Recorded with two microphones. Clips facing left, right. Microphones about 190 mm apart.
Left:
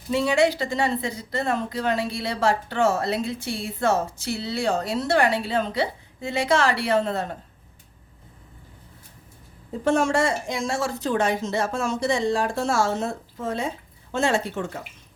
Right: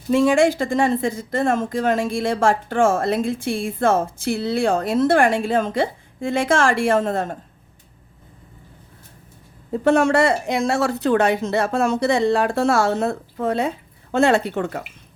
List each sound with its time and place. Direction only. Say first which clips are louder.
0.1 s a woman's voice: right 5 dB; 50° right (ahead or behind)
9.8 s speech: right 5 dB; 65° right (ahead or behind)